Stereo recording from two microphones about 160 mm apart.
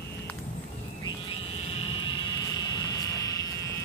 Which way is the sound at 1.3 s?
40° left (ahead or behind).